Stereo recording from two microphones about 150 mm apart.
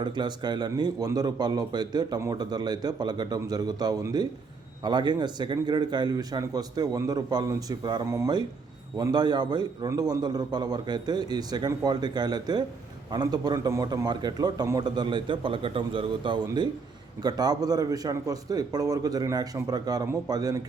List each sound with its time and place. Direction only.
0.0 s a man's voice: 30° right (ahead or behind)